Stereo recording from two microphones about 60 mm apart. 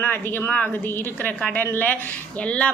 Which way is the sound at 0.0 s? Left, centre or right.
Left.